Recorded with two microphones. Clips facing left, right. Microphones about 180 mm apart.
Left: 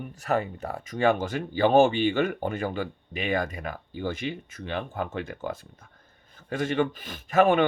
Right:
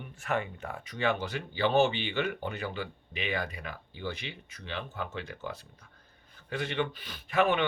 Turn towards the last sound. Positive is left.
turn(degrees=45)  # may be behind; listen again after turning